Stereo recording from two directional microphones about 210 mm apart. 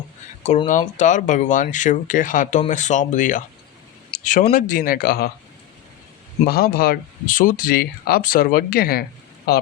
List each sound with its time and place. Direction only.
0.4 s speech: 35° left (ahead or behind)
6.4 s speech: 45° left (ahead or behind)